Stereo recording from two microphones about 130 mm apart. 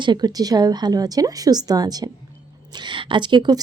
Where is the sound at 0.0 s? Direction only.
35° right (ahead or behind).